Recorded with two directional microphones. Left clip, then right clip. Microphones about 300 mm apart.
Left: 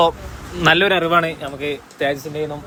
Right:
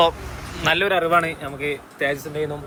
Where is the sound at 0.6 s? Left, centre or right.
Left.